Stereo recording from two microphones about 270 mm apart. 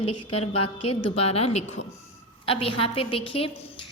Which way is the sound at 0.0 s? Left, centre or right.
Left.